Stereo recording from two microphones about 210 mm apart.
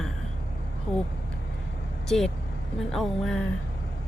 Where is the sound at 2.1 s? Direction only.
Centre (ahead or behind).